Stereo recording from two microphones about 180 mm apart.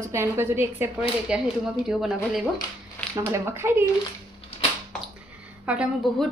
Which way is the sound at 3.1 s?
15° right (ahead or behind).